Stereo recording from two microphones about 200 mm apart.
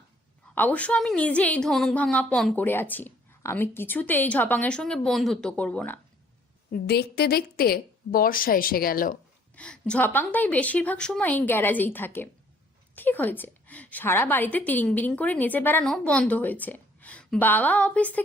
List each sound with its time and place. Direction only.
0.5 s a woman's voice: 5° left (ahead or behind)
6.7 s a woman's voice: 50° left (ahead or behind)
9.6 s a woman's voice: 5° left (ahead or behind)